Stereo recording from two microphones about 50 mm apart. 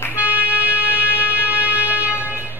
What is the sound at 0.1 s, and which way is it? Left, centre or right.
Music, right.